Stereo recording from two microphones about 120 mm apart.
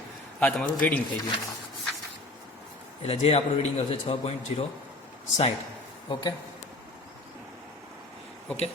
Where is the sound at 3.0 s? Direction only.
60° left (ahead or behind).